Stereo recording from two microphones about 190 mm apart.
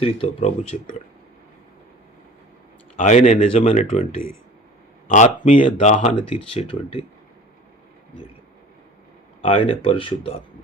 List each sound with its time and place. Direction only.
0.0 s speech: 30° left (ahead or behind)
3.0 s speech: 35° left (ahead or behind)
5.0 s speech: 40° left (ahead or behind)
9.4 s speech: 30° left (ahead or behind)